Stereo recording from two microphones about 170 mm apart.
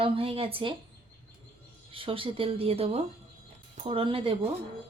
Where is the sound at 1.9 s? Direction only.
30° right (ahead or behind).